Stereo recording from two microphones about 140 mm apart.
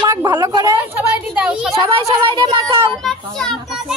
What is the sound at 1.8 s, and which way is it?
Speech, 30° right (ahead or behind).